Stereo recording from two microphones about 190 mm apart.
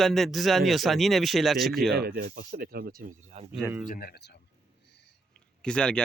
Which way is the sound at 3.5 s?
5° right (ahead or behind).